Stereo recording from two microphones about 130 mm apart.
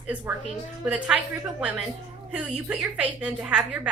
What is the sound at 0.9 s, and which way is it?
Speech, 10° right (ahead or behind).